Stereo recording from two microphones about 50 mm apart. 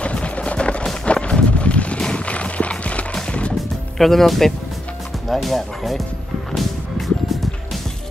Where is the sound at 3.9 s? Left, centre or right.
Centre.